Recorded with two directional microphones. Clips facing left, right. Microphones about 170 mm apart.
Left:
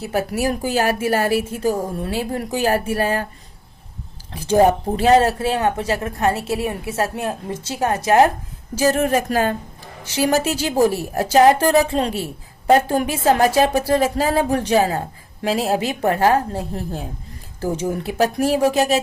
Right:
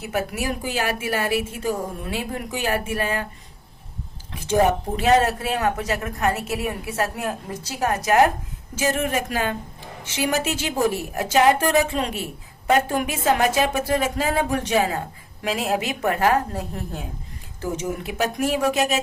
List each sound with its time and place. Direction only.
0.0 s a woman's voice: 35° left (ahead or behind)
4.4 s a woman's voice: 35° left (ahead or behind)